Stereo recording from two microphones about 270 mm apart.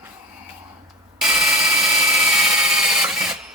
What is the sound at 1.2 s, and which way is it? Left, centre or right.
Drill, centre.